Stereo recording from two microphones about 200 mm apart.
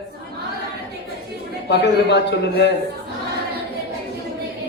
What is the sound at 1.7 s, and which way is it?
A man's voice, 60° left (ahead or behind).